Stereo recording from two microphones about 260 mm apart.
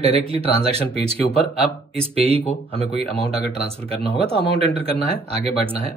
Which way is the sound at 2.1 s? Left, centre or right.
Right.